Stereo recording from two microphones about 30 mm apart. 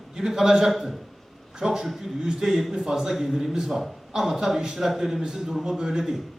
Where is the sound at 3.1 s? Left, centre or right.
Centre.